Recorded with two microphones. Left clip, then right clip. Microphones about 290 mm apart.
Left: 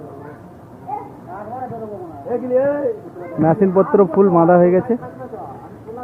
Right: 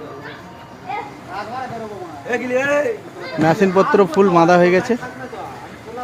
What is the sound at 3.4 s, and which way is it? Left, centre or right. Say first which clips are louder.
Speech: even; centre.